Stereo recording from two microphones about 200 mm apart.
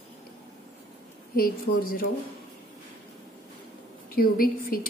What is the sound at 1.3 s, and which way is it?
Speech, 45° left (ahead or behind).